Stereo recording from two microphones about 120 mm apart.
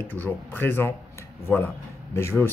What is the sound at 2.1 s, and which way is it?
Speech, 20° left (ahead or behind).